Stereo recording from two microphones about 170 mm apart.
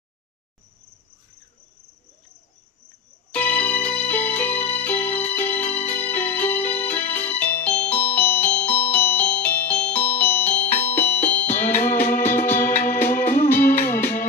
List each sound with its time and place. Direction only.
3.3 s music: 10° left (ahead or behind)
13.1 s music: 45° left (ahead or behind)
13.7 s music: 15° left (ahead or behind)